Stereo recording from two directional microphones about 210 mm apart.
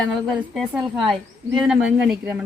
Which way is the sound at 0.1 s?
Centre (ahead or behind).